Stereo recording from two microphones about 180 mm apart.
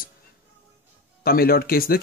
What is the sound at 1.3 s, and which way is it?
Speech, 55° left (ahead or behind).